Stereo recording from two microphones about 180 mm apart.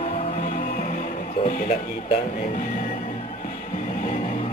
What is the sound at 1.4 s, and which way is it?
Speech, 40° left (ahead or behind).